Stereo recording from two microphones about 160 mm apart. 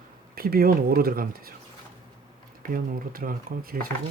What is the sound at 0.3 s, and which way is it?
Speech, 70° right (ahead or behind).